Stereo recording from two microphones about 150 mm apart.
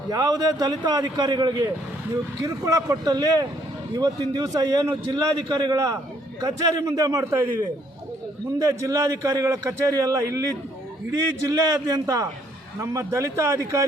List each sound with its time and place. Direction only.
0.1 s a man's voice: 25° right (ahead or behind)
8.5 s a man's voice: 20° right (ahead or behind)
11.6 s a man's voice: 25° right (ahead or behind)